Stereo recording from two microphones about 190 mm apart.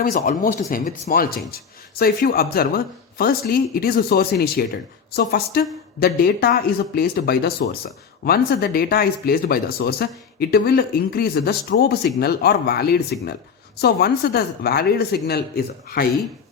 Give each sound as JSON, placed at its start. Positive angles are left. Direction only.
{"t": 0.0, "sound": "speech", "side_deg": 45}